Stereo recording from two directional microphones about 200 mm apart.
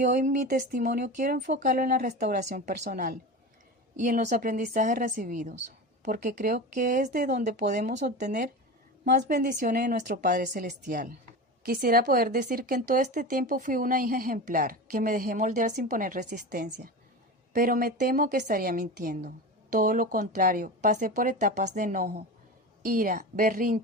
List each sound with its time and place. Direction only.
0.0 s speech: 40° right (ahead or behind)
8.2 s a woman's voice: 55° right (ahead or behind)